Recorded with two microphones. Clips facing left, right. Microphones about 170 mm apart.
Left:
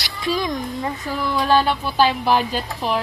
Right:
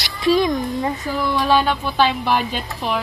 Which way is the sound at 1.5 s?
5° left (ahead or behind).